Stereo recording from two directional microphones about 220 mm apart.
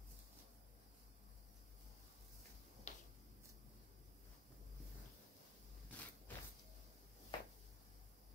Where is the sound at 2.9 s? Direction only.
30° left (ahead or behind).